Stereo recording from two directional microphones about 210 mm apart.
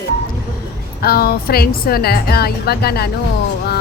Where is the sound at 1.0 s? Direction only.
45° left (ahead or behind).